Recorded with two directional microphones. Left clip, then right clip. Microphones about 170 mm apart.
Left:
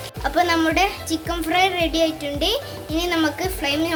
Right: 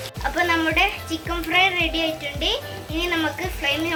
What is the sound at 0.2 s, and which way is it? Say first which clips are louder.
Music: left 2 dB; 70° left (ahead or behind).